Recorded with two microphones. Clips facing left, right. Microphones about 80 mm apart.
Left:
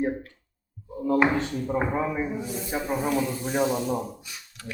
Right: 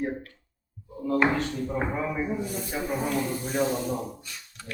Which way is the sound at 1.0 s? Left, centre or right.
Left.